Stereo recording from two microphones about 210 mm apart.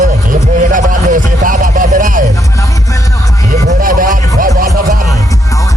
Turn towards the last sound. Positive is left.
turn(degrees=-40)  # may be behind; listen again after turning